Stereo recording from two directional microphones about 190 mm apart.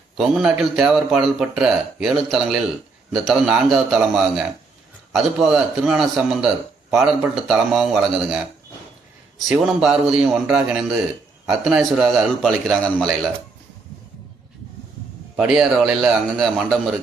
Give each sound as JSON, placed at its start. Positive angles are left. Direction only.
{"t": 0.2, "sound": "speech", "side_deg": -5}
{"t": 9.5, "sound": "speech", "side_deg": 0}
{"t": 15.4, "sound": "speech", "side_deg": -5}